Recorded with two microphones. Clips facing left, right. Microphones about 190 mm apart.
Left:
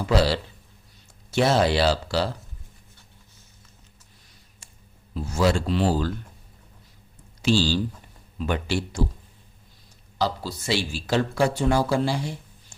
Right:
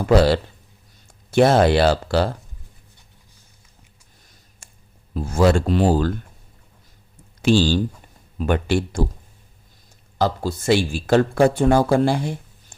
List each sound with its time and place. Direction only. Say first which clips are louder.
0.0 s speech: right 6 dB; 50° right (ahead or behind)
4.6 s a sound: right 3 dB; 50° right (ahead or behind)
5.1 s speech: right 5 dB; 50° right (ahead or behind)
7.4 s speech: right 5 dB; 50° right (ahead or behind)
10.2 s speech: right 5 dB; 50° right (ahead or behind)